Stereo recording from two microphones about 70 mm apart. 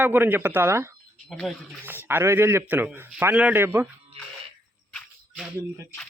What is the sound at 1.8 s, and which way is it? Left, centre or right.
Speech, right.